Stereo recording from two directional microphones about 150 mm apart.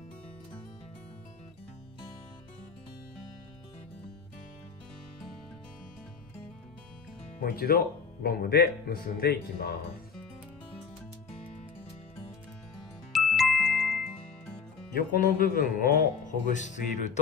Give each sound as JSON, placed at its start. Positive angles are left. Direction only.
{"t": 7.3, "sound": "speech", "side_deg": 80}
{"t": 13.1, "sound": "ding", "side_deg": 0}
{"t": 15.0, "sound": "speech", "side_deg": 65}
{"t": 16.5, "sound": "speech", "side_deg": 55}